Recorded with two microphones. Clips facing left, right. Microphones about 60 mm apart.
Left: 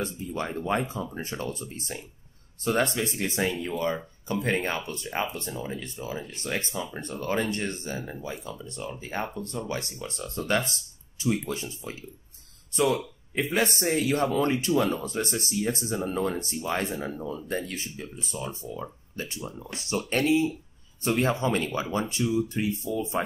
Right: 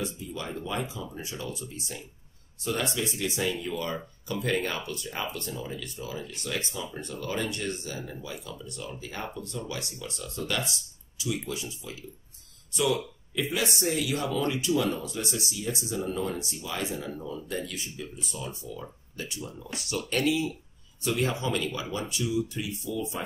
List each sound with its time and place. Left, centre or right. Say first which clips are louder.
0.0 s speech: left 3 dB; left